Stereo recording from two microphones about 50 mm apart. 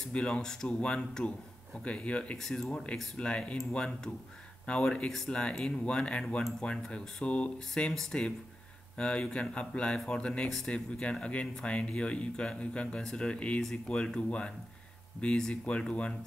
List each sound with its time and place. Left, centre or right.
0.0 s speech: centre
2.3 s speech: centre
3.2 s speech: left